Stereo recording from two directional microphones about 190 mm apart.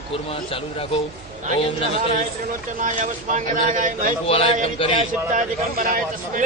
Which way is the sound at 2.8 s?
45° right (ahead or behind).